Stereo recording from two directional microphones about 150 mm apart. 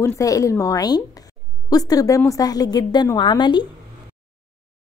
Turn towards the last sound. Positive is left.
turn(degrees=30)  # may be behind; listen again after turning